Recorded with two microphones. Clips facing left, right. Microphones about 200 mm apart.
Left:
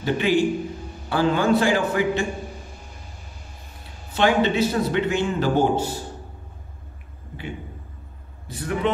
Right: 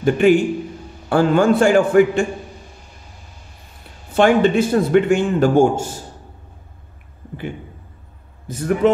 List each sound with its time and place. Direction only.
0.0 s a man's voice: 50° right (ahead or behind)
4.1 s a man's voice: 50° right (ahead or behind)
8.5 s a man's voice: 45° right (ahead or behind)